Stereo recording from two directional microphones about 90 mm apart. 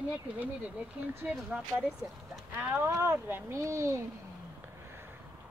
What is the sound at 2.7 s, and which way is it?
Speech, 30° right (ahead or behind).